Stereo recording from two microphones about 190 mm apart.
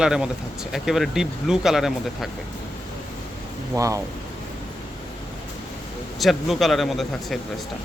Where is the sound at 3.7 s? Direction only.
15° right (ahead or behind).